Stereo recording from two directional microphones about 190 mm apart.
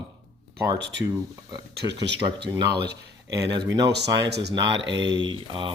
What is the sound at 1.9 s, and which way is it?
Speech, 65° right (ahead or behind).